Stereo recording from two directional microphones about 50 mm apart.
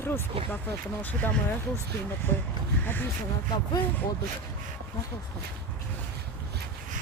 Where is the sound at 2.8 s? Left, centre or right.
Left.